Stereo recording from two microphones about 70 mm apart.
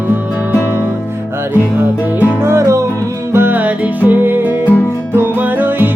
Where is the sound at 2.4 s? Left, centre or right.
Right.